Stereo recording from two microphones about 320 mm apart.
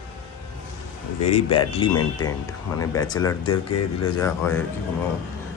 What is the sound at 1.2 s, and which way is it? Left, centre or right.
Speech, centre.